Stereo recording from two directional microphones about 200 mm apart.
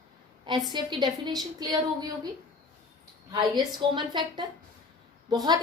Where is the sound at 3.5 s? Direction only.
25° right (ahead or behind).